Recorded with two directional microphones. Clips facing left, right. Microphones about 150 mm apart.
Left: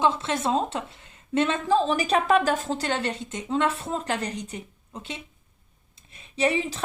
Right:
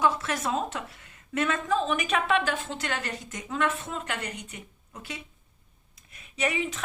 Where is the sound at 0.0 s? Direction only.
25° left (ahead or behind).